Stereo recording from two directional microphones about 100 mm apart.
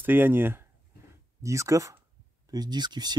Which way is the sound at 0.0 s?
20° right (ahead or behind).